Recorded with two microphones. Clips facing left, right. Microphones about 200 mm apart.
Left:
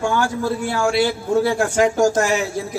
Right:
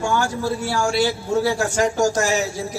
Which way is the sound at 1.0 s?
50° left (ahead or behind).